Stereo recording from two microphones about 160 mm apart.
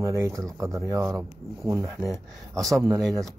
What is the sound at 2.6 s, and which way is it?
Speech, centre (ahead or behind).